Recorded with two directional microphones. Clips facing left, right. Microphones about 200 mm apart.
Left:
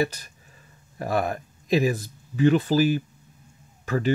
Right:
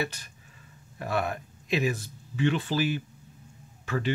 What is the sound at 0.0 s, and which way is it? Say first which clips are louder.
Speech: left 7 dB; 40° left (ahead or behind).